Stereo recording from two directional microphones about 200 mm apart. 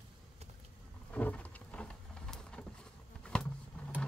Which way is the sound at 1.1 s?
5° left (ahead or behind).